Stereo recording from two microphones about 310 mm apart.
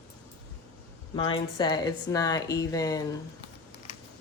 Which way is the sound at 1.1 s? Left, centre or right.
Centre.